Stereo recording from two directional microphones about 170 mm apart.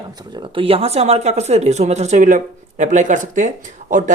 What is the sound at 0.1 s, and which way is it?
Speech, 25° right (ahead or behind).